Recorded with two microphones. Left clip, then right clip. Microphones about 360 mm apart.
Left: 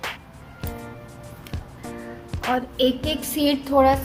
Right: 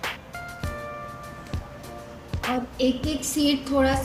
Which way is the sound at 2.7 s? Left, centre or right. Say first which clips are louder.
Left 3 dB; left.